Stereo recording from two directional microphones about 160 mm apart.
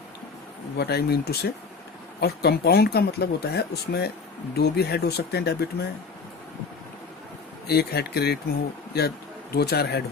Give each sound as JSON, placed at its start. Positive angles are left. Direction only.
{"t": 0.8, "sound": "speech", "side_deg": 80}
{"t": 7.7, "sound": "speech", "side_deg": 85}